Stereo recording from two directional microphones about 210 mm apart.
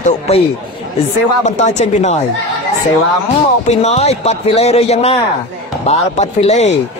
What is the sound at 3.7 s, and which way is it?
A man's voice, 30° left (ahead or behind).